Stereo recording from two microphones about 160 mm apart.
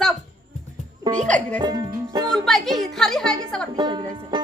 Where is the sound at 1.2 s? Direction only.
10° left (ahead or behind).